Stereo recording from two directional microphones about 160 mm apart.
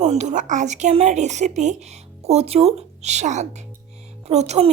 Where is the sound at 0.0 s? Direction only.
45° right (ahead or behind).